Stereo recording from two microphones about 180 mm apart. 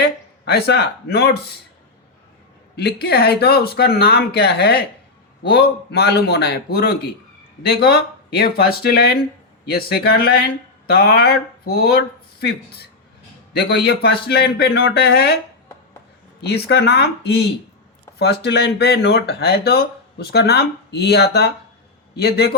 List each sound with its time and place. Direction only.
0.0 s speech: 60° left (ahead or behind)
2.7 s speech: 65° left (ahead or behind)
16.4 s a man's voice: 65° left (ahead or behind)